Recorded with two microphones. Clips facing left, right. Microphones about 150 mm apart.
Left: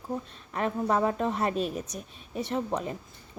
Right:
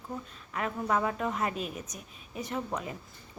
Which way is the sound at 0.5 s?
30° left (ahead or behind).